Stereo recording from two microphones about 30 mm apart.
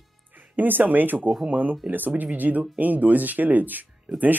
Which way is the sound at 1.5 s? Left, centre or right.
Right.